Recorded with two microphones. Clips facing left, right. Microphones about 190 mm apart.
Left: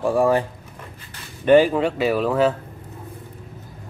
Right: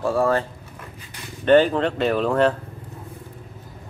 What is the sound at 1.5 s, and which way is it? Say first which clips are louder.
Speech: left 1 dB; 10° left (ahead or behind).